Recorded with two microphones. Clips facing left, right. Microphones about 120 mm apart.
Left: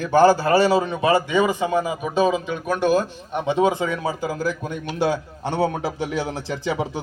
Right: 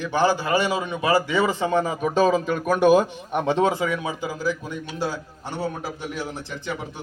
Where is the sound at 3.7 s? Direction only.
30° left (ahead or behind).